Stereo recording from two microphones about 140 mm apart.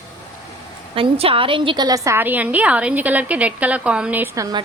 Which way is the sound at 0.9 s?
40° right (ahead or behind).